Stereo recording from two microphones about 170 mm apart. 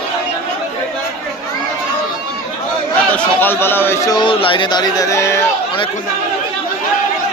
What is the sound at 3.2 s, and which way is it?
A man's voice, 10° left (ahead or behind).